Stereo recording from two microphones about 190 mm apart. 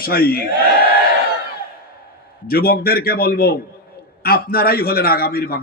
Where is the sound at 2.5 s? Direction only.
55° left (ahead or behind).